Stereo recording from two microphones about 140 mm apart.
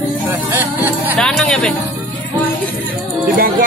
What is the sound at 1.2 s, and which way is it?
Speech, 5° left (ahead or behind).